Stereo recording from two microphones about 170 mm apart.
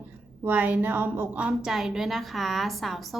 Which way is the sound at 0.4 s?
10° right (ahead or behind).